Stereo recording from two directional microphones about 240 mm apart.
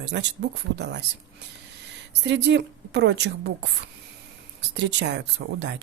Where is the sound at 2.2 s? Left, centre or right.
Right.